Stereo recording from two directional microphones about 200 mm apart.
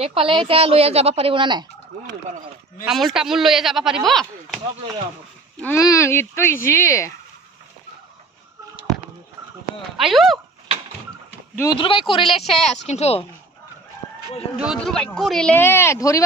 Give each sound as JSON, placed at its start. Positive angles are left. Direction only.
{"t": 0.0, "sound": "speech", "side_deg": -25}
{"t": 2.8, "sound": "speech", "side_deg": 0}
{"t": 5.6, "sound": "speech", "side_deg": 15}
{"t": 9.9, "sound": "speech", "side_deg": 0}
{"t": 11.7, "sound": "a woman's voice", "side_deg": 25}
{"t": 14.6, "sound": "speech", "side_deg": 0}